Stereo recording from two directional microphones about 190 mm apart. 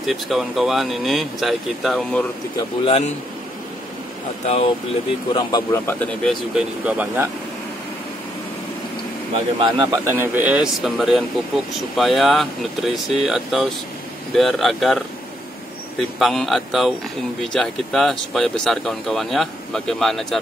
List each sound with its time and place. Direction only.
0.0 s speech: centre (ahead or behind)
2.8 s a man's voice: 30° left (ahead or behind)
5.3 s a man's voice: 20° left (ahead or behind)
6.5 s speech: 5° right (ahead or behind)
9.6 s a man's voice: 25° right (ahead or behind)
10.0 s speech: 10° right (ahead or behind)
16.2 s speech: centre (ahead or behind)